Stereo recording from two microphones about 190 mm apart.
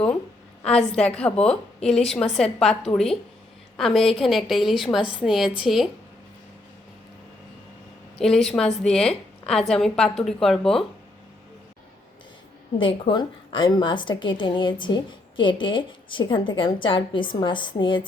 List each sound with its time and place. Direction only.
0.6 s a woman's voice: 5° left (ahead or behind)
8.2 s a woman's voice: centre (ahead or behind)
12.8 s a woman's voice: 25° left (ahead or behind)